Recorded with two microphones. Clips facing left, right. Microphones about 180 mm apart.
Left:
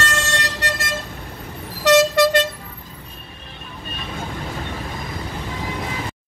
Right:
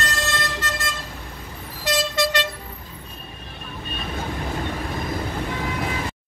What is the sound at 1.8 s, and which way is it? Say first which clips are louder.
Vehicle: left 10 dB; 75° left (ahead or behind).